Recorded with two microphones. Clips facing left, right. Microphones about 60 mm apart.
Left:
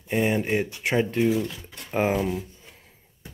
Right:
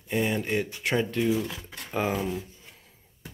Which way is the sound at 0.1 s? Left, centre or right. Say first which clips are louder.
Left 3 dB; left.